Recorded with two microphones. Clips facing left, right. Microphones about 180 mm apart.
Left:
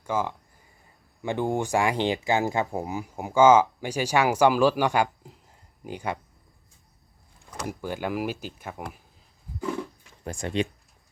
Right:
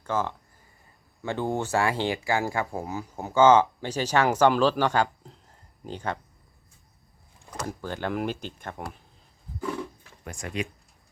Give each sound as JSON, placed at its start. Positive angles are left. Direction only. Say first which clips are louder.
{"t": 0.0, "sound": "speech", "louder": "even", "side_deg": 10}
{"t": 7.7, "sound": "speech", "louder": "left 1 dB", "side_deg": 10}
{"t": 10.2, "sound": "speech", "louder": "left 5 dB", "side_deg": 30}